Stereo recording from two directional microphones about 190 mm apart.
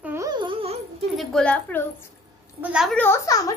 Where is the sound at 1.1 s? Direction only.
5° left (ahead or behind).